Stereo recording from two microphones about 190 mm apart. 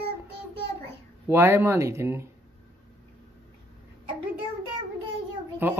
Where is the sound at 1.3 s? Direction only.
15° right (ahead or behind).